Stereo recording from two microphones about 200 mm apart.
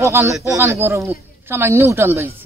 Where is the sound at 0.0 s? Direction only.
15° right (ahead or behind).